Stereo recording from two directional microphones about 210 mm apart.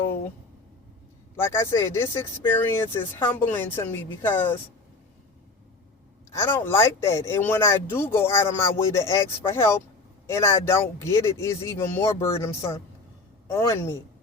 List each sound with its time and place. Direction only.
1.4 s speech: 10° left (ahead or behind)
6.3 s speech: 10° left (ahead or behind)